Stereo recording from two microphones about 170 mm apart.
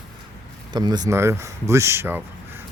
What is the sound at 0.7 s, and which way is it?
Speech, 25° right (ahead or behind).